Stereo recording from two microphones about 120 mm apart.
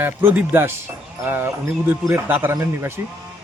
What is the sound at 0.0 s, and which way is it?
A man's voice, 15° right (ahead or behind).